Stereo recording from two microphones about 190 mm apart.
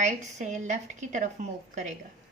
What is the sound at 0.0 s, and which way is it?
A woman's voice, 40° right (ahead or behind).